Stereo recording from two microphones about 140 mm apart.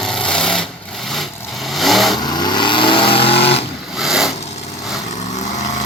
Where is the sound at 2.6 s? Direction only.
35° left (ahead or behind).